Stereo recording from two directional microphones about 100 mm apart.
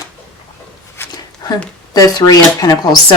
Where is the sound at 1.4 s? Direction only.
40° left (ahead or behind).